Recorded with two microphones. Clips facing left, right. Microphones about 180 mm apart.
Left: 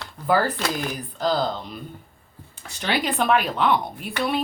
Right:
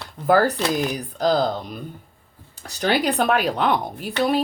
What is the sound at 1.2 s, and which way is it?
Speech, 40° right (ahead or behind).